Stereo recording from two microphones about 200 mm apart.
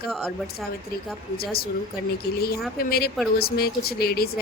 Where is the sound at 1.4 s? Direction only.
50° left (ahead or behind).